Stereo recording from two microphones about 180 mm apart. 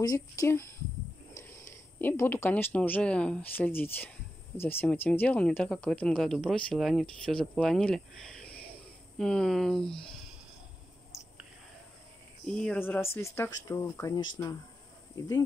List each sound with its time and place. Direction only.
0.4 s speech: 15° left (ahead or behind)
12.4 s speech: 5° left (ahead or behind)